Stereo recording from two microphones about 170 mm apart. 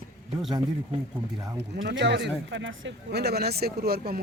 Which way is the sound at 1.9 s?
90° right.